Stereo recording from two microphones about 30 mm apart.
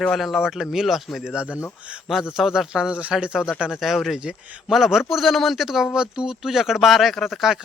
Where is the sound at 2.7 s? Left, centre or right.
Right.